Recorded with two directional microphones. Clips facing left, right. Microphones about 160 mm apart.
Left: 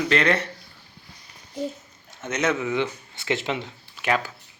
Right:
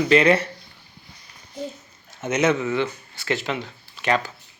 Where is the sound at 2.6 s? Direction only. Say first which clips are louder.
Right 1 dB; 15° left (ahead or behind).